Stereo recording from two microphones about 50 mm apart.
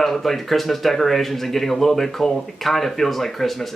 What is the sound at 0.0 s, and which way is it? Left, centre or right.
Speech, centre.